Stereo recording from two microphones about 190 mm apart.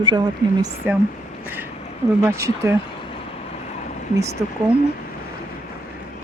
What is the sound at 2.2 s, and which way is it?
Speech, 15° right (ahead or behind).